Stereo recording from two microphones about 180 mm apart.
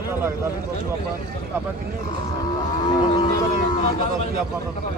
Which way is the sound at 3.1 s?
25° left (ahead or behind).